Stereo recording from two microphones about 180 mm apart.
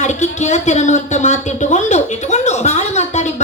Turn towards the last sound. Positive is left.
turn(degrees=40)  # may be behind; listen again after turning